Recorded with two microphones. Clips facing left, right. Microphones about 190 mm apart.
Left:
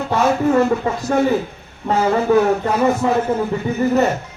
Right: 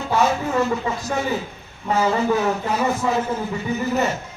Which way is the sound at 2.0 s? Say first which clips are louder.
Left 5 dB; 55° left (ahead or behind).